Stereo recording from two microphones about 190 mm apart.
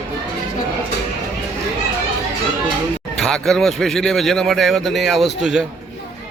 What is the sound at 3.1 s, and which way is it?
A man's voice, centre (ahead or behind).